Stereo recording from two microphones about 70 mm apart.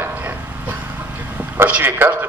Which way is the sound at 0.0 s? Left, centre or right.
Right.